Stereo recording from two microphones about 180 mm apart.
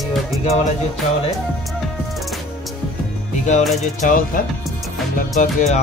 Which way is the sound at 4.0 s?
50° left (ahead or behind).